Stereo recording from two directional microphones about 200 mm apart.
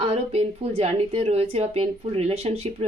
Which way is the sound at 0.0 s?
30° right (ahead or behind).